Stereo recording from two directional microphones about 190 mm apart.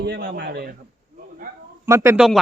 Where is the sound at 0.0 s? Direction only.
60° right (ahead or behind).